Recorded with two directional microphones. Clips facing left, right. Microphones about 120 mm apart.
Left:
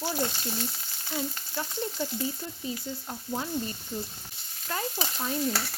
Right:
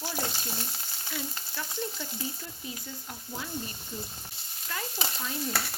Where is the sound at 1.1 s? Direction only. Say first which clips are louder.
Left 5 dB; 35° left (ahead or behind).